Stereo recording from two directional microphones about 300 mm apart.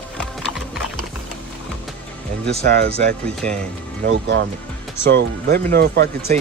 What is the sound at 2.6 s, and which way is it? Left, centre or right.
Speech, right.